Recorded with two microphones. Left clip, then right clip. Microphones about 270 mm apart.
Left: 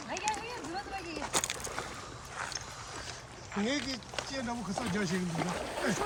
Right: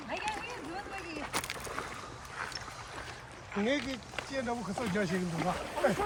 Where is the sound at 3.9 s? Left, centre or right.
Centre.